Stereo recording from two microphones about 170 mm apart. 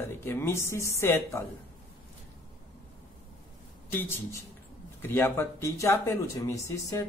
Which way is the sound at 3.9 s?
15° left (ahead or behind).